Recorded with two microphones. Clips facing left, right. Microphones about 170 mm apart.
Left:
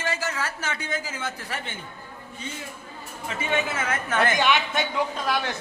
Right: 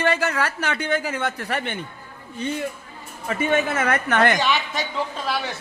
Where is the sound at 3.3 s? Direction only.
50° right (ahead or behind); by 4.3 s 70° right (ahead or behind).